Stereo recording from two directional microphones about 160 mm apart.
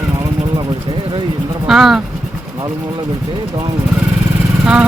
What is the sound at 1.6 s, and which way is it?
Speech, centre (ahead or behind).